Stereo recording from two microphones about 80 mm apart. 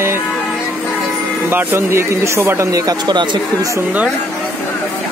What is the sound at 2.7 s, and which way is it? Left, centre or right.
Speech, right.